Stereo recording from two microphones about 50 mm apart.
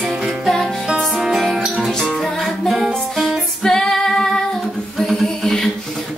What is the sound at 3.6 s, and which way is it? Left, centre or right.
Female singing, centre.